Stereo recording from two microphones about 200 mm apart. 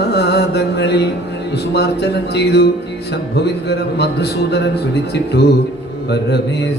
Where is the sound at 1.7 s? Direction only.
55° left (ahead or behind).